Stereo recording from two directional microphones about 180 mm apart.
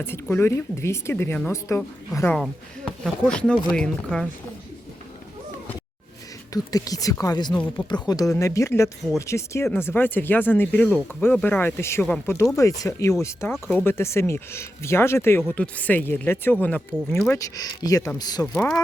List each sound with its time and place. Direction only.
0.0 s speech: 10° left (ahead or behind)
6.5 s speech: 20° left (ahead or behind)
18.5 s speech: 5° left (ahead or behind)